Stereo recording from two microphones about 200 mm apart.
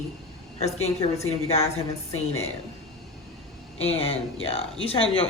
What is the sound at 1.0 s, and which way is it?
Speech, 30° left (ahead or behind).